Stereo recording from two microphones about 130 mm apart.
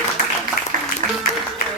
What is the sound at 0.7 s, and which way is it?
Music, 90° right.